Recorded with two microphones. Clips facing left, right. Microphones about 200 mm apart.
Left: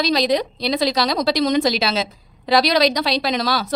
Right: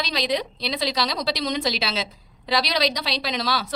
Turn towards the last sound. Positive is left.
turn(degrees=45)  # may be behind; listen again after turning